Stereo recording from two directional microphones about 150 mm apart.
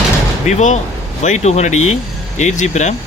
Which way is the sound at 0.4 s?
55° left (ahead or behind).